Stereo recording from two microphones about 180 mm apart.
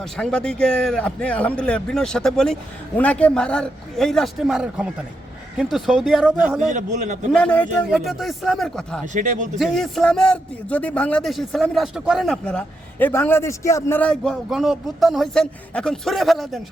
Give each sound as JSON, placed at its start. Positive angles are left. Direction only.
{"t": 0.0, "sound": "a man's voice", "side_deg": 5}
{"t": 6.7, "sound": "a man's voice", "side_deg": -45}
{"t": 7.3, "sound": "a man's voice", "side_deg": 5}
{"t": 9.1, "sound": "a man's voice", "side_deg": -45}
{"t": 9.6, "sound": "a man's voice", "side_deg": 0}